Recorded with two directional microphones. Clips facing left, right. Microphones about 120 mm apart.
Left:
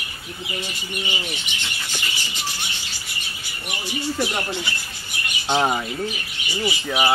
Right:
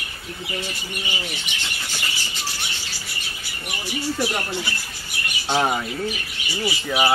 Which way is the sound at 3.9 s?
20° left (ahead or behind).